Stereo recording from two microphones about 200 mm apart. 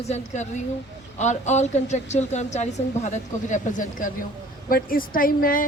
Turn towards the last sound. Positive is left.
turn(degrees=45)  # may be behind; listen again after turning